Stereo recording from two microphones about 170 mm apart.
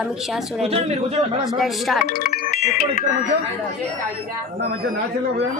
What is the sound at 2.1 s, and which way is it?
Music, 60° left (ahead or behind).